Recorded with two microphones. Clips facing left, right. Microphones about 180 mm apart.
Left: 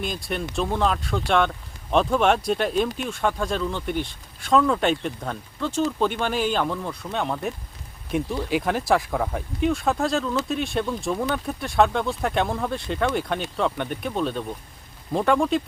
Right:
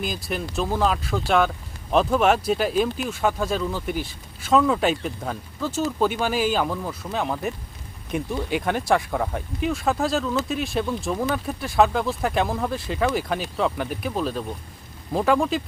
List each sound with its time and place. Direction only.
0.0 s speech: centre (ahead or behind)